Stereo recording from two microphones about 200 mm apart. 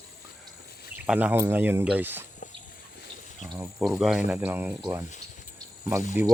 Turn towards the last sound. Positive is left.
turn(degrees=-10)  # may be behind; listen again after turning